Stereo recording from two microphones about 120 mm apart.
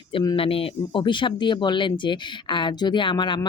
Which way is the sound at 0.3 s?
50° left (ahead or behind).